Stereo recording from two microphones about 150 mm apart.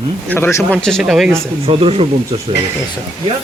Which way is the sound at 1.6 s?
40° right (ahead or behind).